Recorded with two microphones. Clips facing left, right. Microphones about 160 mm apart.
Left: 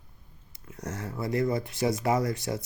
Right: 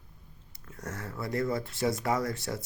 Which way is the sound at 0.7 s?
20° left (ahead or behind).